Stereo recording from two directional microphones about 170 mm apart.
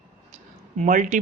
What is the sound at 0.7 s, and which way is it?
Speech, 45° right (ahead or behind).